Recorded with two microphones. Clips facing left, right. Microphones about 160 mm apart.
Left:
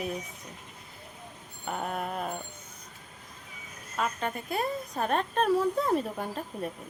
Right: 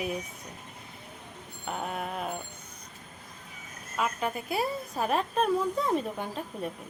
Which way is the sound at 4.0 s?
5° right (ahead or behind).